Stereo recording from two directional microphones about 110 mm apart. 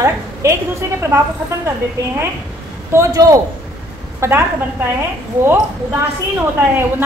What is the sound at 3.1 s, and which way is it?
A woman's voice, 30° right (ahead or behind).